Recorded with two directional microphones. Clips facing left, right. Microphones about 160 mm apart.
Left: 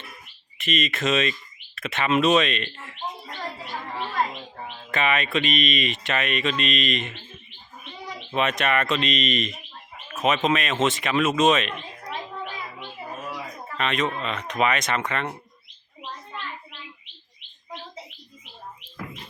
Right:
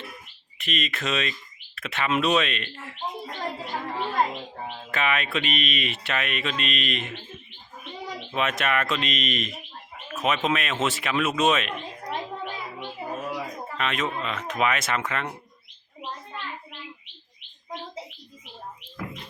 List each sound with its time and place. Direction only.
0.6 s speech: centre (ahead or behind)
3.4 s a sound: 20° right (ahead or behind)
4.9 s speech: 5° right (ahead or behind)
8.3 s speech: centre (ahead or behind)
13.7 s speech: 5° right (ahead or behind)